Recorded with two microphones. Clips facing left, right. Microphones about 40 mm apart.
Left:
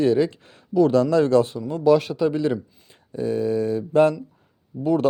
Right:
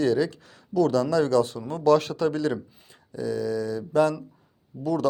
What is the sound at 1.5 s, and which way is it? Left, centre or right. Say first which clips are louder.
Speech: left 3 dB; centre.